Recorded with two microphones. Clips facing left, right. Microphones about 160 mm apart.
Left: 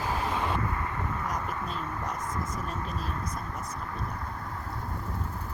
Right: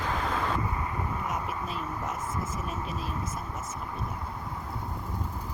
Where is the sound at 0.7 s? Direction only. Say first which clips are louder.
Even; 15° right (ahead or behind).